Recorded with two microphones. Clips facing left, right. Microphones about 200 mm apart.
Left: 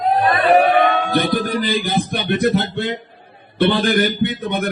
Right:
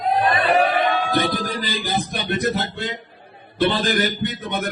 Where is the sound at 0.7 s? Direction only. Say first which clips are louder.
Left 4 dB; 60° left (ahead or behind).